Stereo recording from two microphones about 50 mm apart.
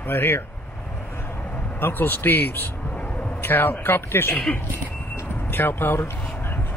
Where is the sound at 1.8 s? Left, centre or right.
Left.